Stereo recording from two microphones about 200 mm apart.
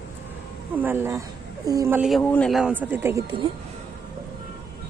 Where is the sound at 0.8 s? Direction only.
10° right (ahead or behind).